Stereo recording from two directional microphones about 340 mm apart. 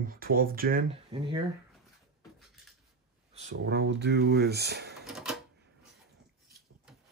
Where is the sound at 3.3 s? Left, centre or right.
Right.